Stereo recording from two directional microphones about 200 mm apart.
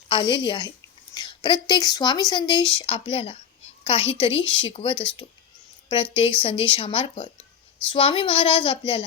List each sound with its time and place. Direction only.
0.1 s speech: 25° left (ahead or behind)